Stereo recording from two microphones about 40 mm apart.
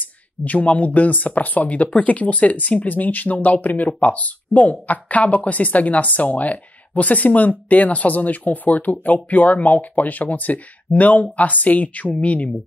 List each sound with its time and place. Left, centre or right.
0.5 s speech: left